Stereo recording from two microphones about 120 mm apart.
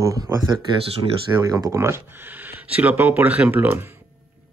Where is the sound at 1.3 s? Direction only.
20° right (ahead or behind).